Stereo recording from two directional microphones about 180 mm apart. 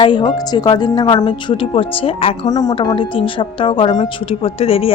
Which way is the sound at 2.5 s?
20° left (ahead or behind).